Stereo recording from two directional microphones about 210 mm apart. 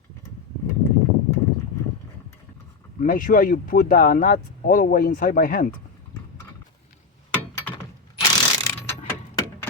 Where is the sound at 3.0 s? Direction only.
40° left (ahead or behind).